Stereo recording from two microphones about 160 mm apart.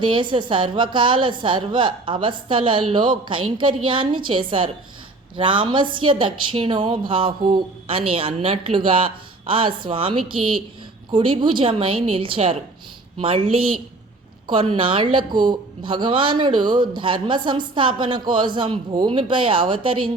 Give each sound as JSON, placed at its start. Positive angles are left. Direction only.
{"t": 0.0, "sound": "a woman's voice", "side_deg": -30}